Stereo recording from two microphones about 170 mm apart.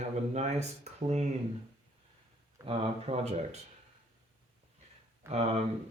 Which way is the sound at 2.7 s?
35° right (ahead or behind).